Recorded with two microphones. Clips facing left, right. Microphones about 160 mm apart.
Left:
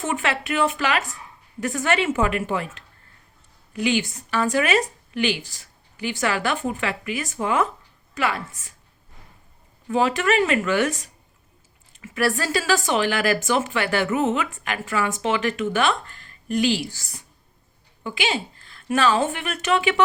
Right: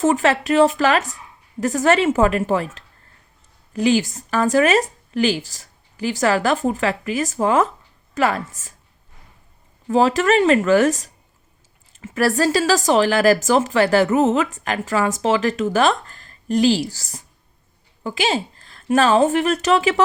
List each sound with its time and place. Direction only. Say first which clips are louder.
0.0 s a woman's voice: right 8 dB; 40° right (ahead or behind)
9.9 s speech: right 5 dB; 40° right (ahead or behind)
18.0 s a sound: right 5 dB; 40° right (ahead or behind)
18.9 s speech: right 6 dB; 40° right (ahead or behind)